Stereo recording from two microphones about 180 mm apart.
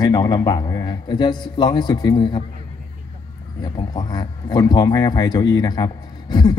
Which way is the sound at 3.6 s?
20° left (ahead or behind).